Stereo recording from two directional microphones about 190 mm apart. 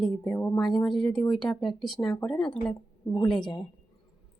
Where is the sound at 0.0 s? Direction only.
5° left (ahead or behind).